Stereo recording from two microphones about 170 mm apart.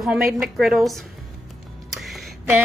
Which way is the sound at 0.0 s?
Centre (ahead or behind).